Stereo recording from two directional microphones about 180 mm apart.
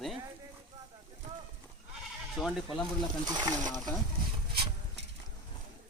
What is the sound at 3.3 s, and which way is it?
Speech, 20° right (ahead or behind).